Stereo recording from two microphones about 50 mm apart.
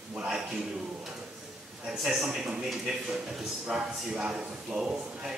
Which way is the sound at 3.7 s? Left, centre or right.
Centre.